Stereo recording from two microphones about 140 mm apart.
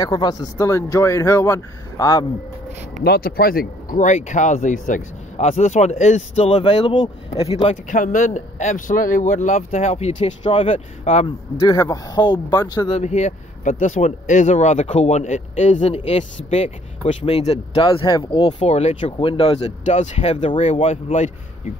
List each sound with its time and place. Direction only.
0.0 s speech: 30° left (ahead or behind)
3.2 s speech: 90° left; by 6.5 s 55° left (ahead or behind)
6.5 s speech: 35° left (ahead or behind)
7.4 s speech: 45° left (ahead or behind)
7.9 s speech: 70° left (ahead or behind); by 11.2 s 50° left (ahead or behind)
11.6 s speech: 25° left (ahead or behind)
12.9 s speech: 55° left (ahead or behind); by 18.6 s 35° left (ahead or behind)
18.6 s speech: 50° left (ahead or behind)